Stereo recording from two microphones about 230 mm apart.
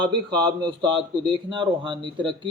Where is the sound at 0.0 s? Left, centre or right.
Right.